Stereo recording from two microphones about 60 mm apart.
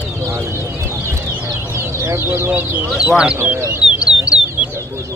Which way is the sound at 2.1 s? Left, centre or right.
Right.